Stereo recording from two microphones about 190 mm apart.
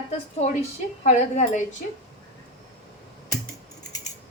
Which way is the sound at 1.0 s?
40° left (ahead or behind).